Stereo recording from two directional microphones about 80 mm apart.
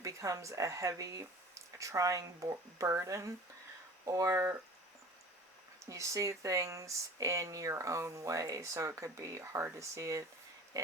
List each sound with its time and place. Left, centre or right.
0.0 s speech: right
5.8 s speech: right
10.7 s pig: right